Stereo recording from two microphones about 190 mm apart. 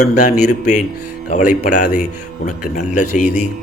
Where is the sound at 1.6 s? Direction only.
40° left (ahead or behind).